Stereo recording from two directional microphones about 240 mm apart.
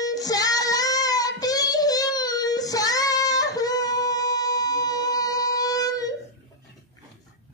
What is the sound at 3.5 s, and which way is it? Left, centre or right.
Music, centre.